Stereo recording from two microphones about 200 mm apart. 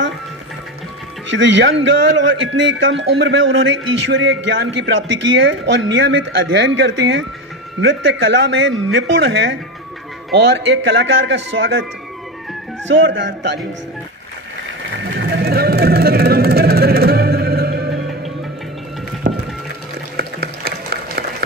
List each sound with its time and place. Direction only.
1.3 s a man's voice: 65° right (ahead or behind)
12.8 s speech: 65° right (ahead or behind)
15.2 s a sound: 55° right (ahead or behind)
19.2 s music: 45° right (ahead or behind)
20.2 s applause: 50° right (ahead or behind)